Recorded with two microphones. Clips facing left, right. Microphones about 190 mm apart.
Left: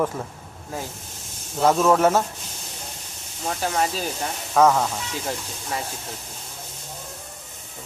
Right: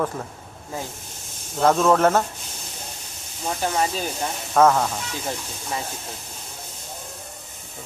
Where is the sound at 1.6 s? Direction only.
5° left (ahead or behind).